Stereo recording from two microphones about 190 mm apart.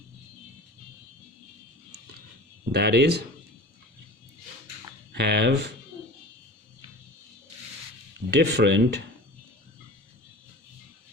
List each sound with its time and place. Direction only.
2.7 s speech: 60° right (ahead or behind)
5.1 s speech: 60° right (ahead or behind)
8.3 s speech: 60° right (ahead or behind)